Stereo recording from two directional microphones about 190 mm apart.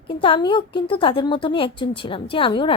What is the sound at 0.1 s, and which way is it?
A woman's voice, 25° left (ahead or behind).